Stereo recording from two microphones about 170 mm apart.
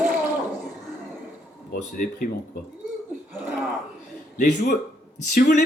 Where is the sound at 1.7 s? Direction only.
55° left (ahead or behind).